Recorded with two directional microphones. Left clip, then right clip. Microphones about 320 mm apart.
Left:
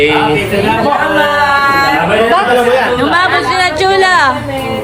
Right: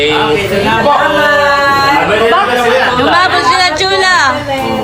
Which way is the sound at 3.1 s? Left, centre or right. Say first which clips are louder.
Right 2 dB; centre.